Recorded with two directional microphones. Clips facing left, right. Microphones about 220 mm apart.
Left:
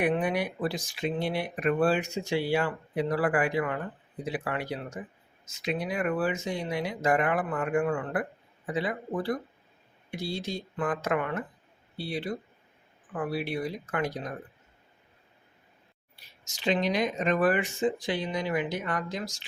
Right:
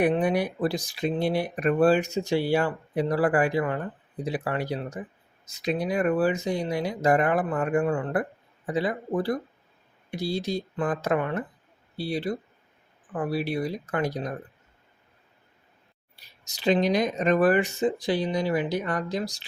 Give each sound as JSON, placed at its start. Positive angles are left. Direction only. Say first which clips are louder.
{"t": 0.1, "sound": "speech", "louder": "right 4 dB", "side_deg": -35}
{"t": 16.5, "sound": "speech", "louder": "right 5 dB", "side_deg": -35}